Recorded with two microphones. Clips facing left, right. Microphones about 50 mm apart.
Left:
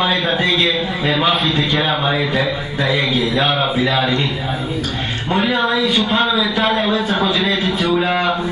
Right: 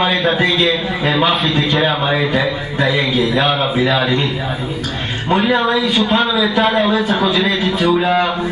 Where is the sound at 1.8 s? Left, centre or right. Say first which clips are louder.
Right 2 dB; right.